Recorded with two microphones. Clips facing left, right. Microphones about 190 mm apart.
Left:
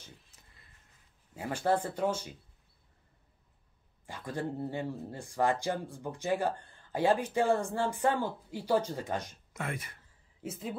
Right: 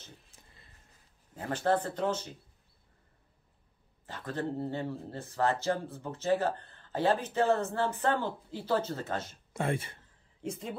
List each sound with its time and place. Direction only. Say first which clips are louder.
0.3 s a sound: right 3 dB; 30° right (ahead or behind)
1.3 s speech: right 1 dB; 10° left (ahead or behind)
4.0 s speech: right 1 dB; 10° left (ahead or behind)
9.5 s speech: right 7 dB; 30° right (ahead or behind)
10.4 s speech: right 1 dB; 5° left (ahead or behind)